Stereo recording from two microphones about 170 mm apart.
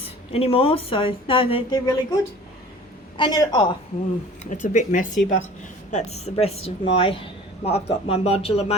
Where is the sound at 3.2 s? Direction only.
25° left (ahead or behind).